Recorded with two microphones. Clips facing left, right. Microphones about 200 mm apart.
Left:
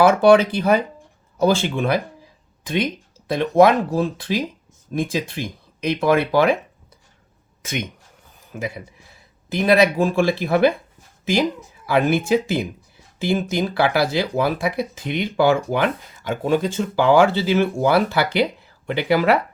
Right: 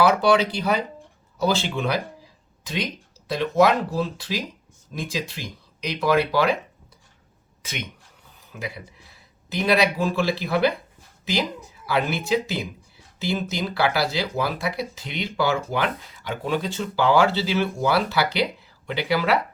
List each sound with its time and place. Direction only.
0.0 s speech: 50° left (ahead or behind)
7.6 s speech: 50° left (ahead or behind)
8.4 s a sound: 50° left (ahead or behind)
9.5 s speech: 50° left (ahead or behind)
11.9 s speech: 50° left (ahead or behind)